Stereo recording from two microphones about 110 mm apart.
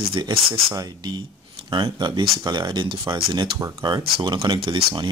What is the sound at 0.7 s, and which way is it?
Speech, 40° right (ahead or behind).